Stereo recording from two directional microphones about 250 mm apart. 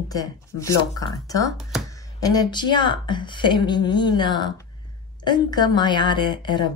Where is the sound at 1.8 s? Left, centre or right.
Centre.